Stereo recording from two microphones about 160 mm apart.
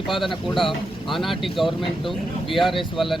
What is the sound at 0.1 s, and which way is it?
Speech, centre (ahead or behind).